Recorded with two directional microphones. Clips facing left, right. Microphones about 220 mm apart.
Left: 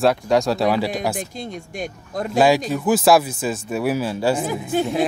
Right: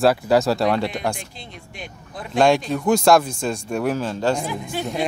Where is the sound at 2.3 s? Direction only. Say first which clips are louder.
Even; 5° left (ahead or behind).